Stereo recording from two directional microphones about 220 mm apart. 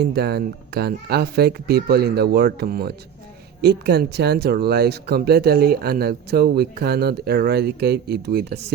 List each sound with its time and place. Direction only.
0.0 s speech: 50° right (ahead or behind)